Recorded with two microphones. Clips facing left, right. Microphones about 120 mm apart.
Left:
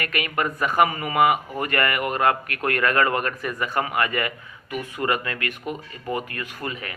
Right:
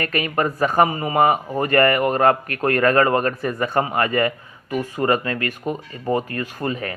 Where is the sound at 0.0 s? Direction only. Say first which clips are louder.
Right 4 dB; 35° right (ahead or behind).